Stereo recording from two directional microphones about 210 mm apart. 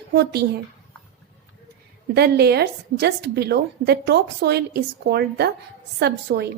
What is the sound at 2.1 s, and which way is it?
A woman's voice, 50° right (ahead or behind).